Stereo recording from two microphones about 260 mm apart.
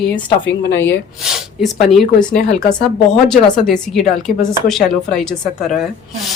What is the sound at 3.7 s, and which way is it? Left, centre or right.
A woman's voice, centre.